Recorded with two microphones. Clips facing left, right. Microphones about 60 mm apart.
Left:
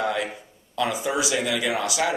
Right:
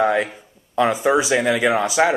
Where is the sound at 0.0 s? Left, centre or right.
Right.